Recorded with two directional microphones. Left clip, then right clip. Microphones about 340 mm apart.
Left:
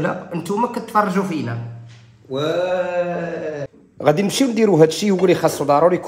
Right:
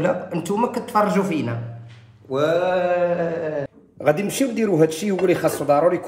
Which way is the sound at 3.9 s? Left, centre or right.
Left.